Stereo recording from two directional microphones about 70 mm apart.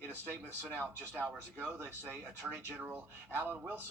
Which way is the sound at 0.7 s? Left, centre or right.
Right.